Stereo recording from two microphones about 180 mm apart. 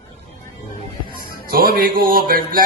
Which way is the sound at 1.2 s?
55° right (ahead or behind).